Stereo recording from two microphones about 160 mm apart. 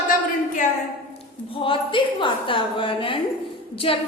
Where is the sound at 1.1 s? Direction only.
35° left (ahead or behind).